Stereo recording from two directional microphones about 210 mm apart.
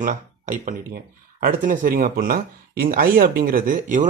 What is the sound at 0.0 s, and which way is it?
Speech, 40° right (ahead or behind).